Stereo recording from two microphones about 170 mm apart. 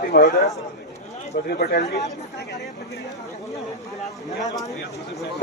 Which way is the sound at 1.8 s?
20° left (ahead or behind).